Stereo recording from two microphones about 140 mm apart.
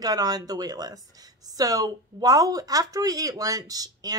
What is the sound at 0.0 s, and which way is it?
Speech, 25° right (ahead or behind).